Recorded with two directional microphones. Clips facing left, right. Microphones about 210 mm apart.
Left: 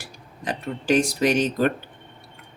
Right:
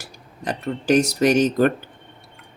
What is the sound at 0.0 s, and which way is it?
Speech, 40° right (ahead or behind).